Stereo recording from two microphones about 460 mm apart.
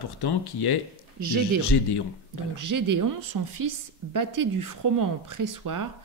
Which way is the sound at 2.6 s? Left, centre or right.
Right.